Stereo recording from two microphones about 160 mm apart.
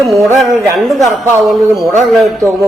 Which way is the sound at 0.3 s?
Centre (ahead or behind).